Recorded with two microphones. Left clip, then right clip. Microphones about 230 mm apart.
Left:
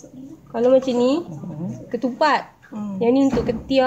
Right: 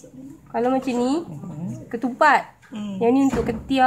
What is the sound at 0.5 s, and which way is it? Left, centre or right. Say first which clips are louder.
Speech: left 5 dB; right.